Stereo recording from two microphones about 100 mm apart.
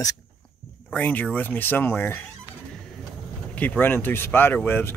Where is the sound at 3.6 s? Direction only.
20° left (ahead or behind).